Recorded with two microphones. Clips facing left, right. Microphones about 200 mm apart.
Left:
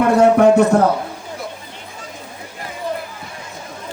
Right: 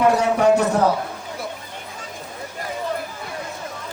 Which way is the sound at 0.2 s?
55° left (ahead or behind).